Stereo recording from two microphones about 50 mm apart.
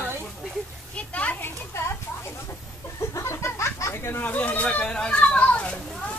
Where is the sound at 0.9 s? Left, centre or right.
Left.